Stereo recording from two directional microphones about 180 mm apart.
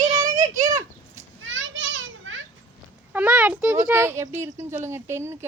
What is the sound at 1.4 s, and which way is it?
Children playing, 90° right.